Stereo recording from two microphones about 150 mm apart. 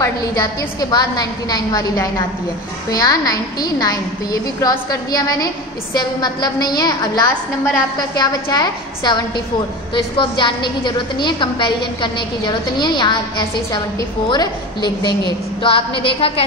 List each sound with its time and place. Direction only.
0.0 s a woman's voice: 25° left (ahead or behind); by 16.4 s 40° left (ahead or behind)